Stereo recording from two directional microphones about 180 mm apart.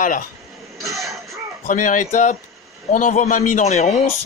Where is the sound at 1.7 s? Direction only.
45° left (ahead or behind).